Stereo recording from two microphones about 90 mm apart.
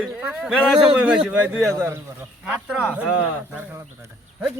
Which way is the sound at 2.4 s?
10° right (ahead or behind).